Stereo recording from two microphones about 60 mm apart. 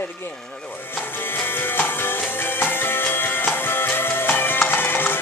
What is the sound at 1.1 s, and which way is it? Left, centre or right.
Music, left.